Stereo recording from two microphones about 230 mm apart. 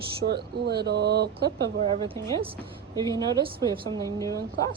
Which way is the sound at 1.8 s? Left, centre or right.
Right.